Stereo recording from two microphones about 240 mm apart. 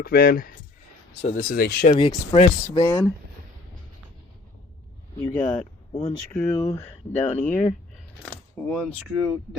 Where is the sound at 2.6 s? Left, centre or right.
Centre.